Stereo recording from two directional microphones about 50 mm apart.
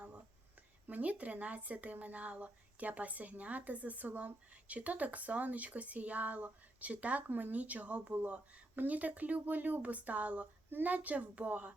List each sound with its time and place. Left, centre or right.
0.9 s speech: right